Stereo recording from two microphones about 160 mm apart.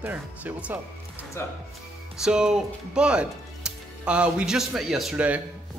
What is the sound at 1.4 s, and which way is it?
Speech, 15° left (ahead or behind).